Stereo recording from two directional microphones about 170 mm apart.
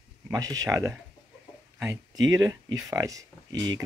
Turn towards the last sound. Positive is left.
turn(degrees=-25)  # may be behind; listen again after turning